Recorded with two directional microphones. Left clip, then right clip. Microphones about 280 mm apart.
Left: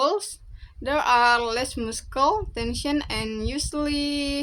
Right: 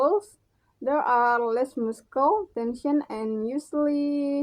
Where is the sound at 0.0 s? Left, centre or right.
Centre.